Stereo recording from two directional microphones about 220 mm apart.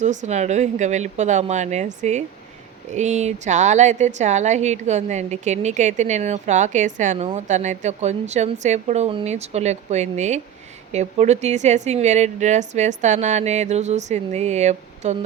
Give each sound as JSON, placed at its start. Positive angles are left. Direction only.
{"t": 0.0, "sound": "a woman's voice", "side_deg": -35}